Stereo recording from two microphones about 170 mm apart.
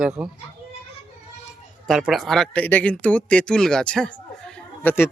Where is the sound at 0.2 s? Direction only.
5° right (ahead or behind).